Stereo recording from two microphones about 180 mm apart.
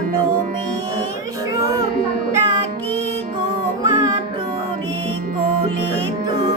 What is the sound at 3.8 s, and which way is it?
Music, 20° right (ahead or behind).